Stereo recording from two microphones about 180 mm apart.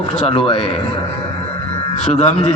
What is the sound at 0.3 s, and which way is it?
Speech, 30° left (ahead or behind).